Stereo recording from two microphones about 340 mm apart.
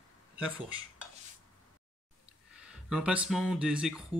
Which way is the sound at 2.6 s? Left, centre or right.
Centre.